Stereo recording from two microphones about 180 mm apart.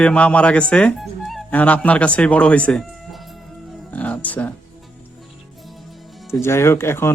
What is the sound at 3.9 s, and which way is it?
Music, 10° left (ahead or behind).